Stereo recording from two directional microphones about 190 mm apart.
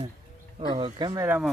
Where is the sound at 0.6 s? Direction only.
30° right (ahead or behind).